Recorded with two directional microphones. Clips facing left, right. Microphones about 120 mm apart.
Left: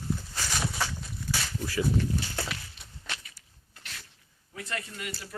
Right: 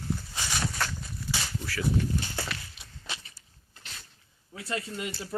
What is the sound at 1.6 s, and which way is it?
Speech, 20° left (ahead or behind).